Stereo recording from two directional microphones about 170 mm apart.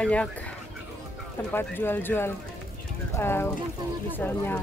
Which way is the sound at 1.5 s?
10° left (ahead or behind).